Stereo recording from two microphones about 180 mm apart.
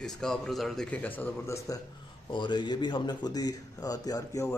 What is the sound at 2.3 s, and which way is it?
A man's voice, 25° left (ahead or behind).